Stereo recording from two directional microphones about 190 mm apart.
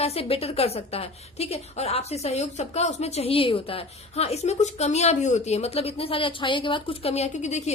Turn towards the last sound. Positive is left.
turn(degrees=35)  # may be behind; listen again after turning